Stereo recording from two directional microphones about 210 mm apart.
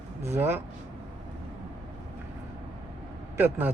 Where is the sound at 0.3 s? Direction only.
10° right (ahead or behind).